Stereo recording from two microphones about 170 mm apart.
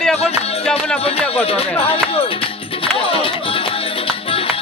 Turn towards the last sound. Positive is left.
turn(degrees=35)  # may be behind; listen again after turning